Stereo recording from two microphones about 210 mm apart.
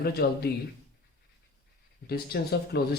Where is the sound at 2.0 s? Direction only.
50° left (ahead or behind).